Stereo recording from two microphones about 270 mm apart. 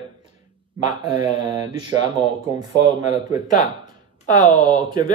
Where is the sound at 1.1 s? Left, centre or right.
Centre.